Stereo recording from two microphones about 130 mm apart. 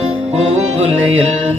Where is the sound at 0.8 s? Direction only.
55° right (ahead or behind).